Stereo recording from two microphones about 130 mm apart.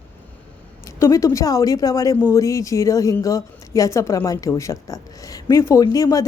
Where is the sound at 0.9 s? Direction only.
20° left (ahead or behind).